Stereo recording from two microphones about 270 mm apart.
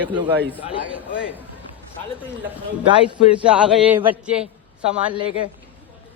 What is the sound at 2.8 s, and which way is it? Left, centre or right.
Speech, centre.